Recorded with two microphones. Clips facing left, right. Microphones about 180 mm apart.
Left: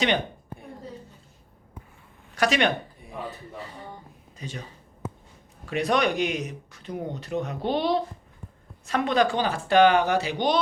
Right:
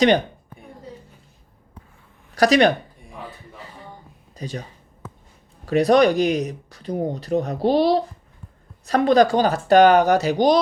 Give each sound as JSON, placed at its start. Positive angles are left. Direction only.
{"t": 2.3, "sound": "speech", "side_deg": -35}
{"t": 4.4, "sound": "speech", "side_deg": -40}
{"t": 5.6, "sound": "speech", "side_deg": -35}